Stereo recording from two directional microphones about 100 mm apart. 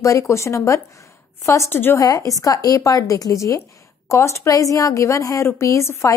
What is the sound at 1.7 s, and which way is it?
Speech, 20° left (ahead or behind).